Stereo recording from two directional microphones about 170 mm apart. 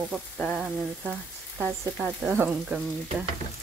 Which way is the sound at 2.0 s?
10° right (ahead or behind).